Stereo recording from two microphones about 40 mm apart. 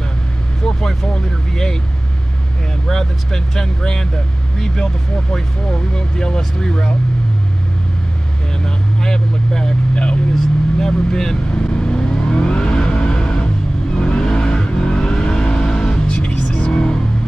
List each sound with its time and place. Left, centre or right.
0.7 s speech: centre
2.9 s speech: centre
5.3 s speech: centre
8.6 s vehicle: centre; by 16.8 s left